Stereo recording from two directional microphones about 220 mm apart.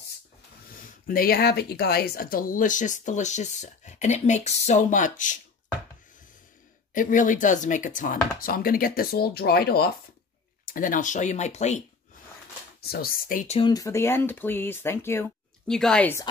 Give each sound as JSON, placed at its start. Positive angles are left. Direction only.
{"t": 0.7, "sound": "speech", "side_deg": 40}
{"t": 6.9, "sound": "speech", "side_deg": 35}
{"t": 12.8, "sound": "speech", "side_deg": 45}